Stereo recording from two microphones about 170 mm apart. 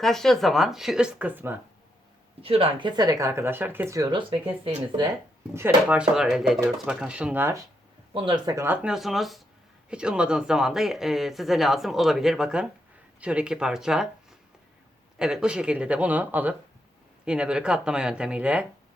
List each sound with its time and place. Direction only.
0.0 s speech: centre (ahead or behind)
2.4 s speech: 35° right (ahead or behind)
5.5 s speech: 10° right (ahead or behind)
8.1 s speech: 30° right (ahead or behind)
8.5 s speech: 10° right (ahead or behind)